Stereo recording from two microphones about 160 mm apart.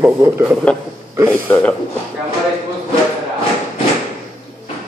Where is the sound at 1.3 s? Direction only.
10° left (ahead or behind).